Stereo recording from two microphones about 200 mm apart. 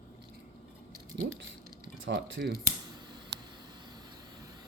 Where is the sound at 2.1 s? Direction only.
50° right (ahead or behind).